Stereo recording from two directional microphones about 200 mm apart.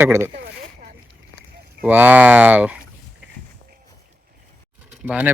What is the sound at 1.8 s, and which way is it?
Speech, 10° right (ahead or behind).